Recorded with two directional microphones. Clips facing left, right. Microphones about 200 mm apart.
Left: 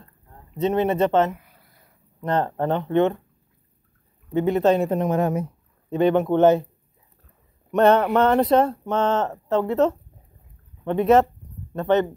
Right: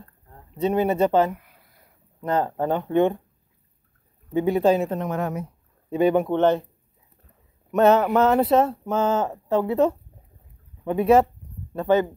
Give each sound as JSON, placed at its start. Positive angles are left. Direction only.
{"t": 0.6, "sound": "speech", "side_deg": -10}
{"t": 4.3, "sound": "speech", "side_deg": -10}
{"t": 4.8, "sound": "a woman's voice", "side_deg": 20}
{"t": 5.9, "sound": "speech", "side_deg": -10}
{"t": 6.3, "sound": "speech", "side_deg": 10}
{"t": 7.7, "sound": "speech", "side_deg": -5}